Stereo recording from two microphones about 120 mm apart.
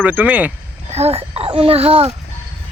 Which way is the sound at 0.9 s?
55° right (ahead or behind).